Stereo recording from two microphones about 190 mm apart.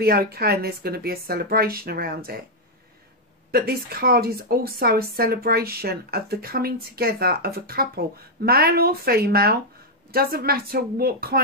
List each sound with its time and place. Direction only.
0.0 s speech: 55° right (ahead or behind)
3.5 s speech: 50° right (ahead or behind)